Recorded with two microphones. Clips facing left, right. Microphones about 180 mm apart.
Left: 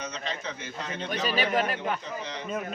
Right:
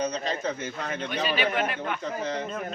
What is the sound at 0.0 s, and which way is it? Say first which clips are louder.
Speech: right 7 dB; 35° right (ahead or behind).